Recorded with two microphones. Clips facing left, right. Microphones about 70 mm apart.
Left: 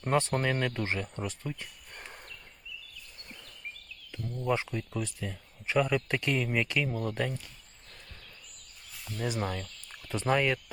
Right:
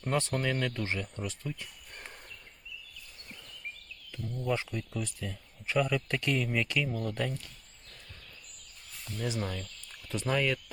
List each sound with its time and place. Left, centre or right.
0.1 s speech: left
4.4 s speech: left
9.3 s speech: left